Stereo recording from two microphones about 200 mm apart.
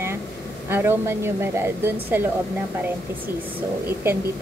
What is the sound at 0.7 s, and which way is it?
A woman's voice, 10° right (ahead or behind).